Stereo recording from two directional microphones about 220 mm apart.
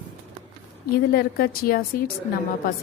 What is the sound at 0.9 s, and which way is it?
A woman's voice, 45° left (ahead or behind).